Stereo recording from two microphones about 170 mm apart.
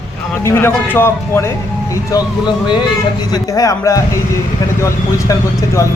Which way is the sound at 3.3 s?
20° left (ahead or behind).